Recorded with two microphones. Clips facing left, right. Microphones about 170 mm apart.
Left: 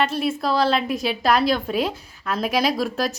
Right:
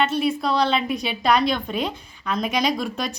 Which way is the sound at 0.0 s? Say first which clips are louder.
Right 1 dB; centre (ahead or behind).